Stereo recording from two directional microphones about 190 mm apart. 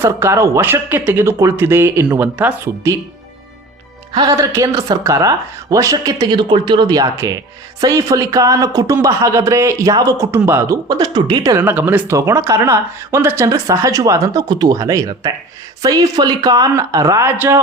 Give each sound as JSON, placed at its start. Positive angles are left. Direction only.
{"t": 0.0, "sound": "speech", "side_deg": -15}
{"t": 4.1, "sound": "speech", "side_deg": -20}
{"t": 11.6, "sound": "speech", "side_deg": -10}